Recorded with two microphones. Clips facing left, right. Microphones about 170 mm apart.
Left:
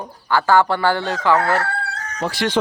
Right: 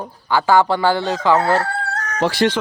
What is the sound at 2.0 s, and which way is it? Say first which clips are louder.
Chicken: right 9 dB; 75° right (ahead or behind).